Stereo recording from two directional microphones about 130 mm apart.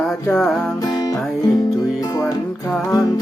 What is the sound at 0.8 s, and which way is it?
Music, 30° left (ahead or behind).